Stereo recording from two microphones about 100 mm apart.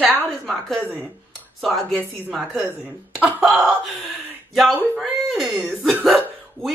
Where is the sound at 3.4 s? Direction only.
Centre (ahead or behind).